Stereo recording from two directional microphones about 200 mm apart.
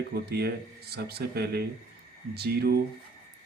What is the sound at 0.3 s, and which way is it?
Speech, 55° right (ahead or behind).